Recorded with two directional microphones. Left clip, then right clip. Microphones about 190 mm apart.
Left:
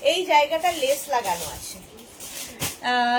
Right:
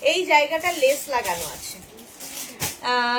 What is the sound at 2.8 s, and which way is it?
Music, 15° right (ahead or behind).